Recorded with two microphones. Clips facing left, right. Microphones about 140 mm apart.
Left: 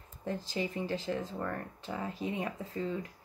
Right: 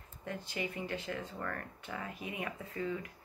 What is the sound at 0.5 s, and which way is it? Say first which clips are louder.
Speech: left 3 dB; 30° left (ahead or behind).